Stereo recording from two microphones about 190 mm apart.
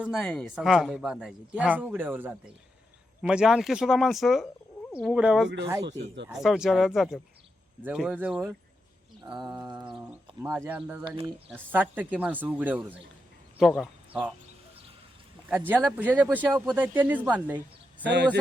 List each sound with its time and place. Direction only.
0.0 s speech: centre (ahead or behind)
5.8 s speech: 65° right (ahead or behind)
6.2 s speech: centre (ahead or behind)
9.2 s a sound: 20° right (ahead or behind)
10.0 s speech: 10° right (ahead or behind)
15.4 s speech: 10° right (ahead or behind)